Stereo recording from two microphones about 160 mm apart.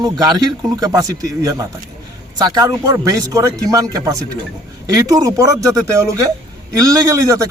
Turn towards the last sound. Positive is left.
turn(degrees=-20)  # may be behind; listen again after turning